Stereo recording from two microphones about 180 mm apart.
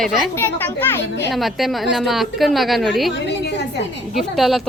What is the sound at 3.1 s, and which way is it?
Speech, 75° left (ahead or behind).